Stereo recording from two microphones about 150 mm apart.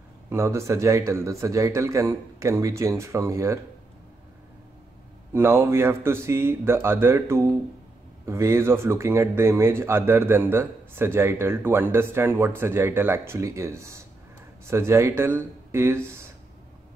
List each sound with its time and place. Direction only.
0.3 s a man's voice: 20° right (ahead or behind)
5.3 s speech: 15° right (ahead or behind)